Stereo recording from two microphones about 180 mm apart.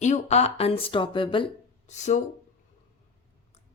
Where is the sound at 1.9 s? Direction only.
40° left (ahead or behind).